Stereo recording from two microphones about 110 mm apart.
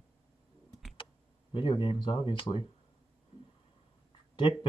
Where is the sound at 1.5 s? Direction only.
45° left (ahead or behind).